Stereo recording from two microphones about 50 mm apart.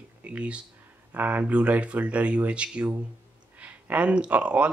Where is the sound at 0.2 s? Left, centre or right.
Right.